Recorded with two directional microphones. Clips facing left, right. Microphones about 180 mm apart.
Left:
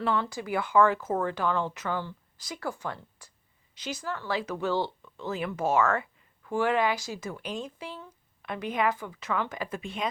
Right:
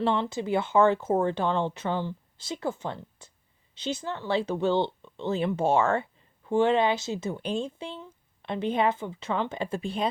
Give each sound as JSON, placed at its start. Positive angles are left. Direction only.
{"t": 0.0, "sound": "speech", "side_deg": -25}